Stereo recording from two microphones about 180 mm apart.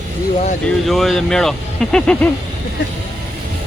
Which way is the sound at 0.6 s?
Centre (ahead or behind).